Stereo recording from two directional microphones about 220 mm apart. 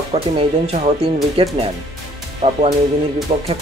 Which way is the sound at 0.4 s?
25° right (ahead or behind).